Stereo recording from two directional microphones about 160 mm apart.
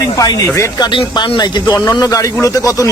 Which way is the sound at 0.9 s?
30° left (ahead or behind).